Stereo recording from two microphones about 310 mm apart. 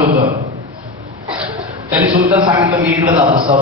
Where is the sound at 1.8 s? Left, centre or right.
Centre.